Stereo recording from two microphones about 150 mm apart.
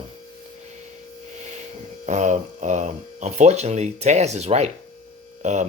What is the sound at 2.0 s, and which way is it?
Speech, 55° right (ahead or behind).